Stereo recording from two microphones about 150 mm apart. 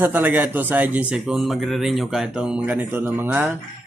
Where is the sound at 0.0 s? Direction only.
10° right (ahead or behind).